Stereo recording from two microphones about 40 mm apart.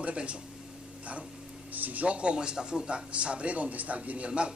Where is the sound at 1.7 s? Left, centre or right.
Right.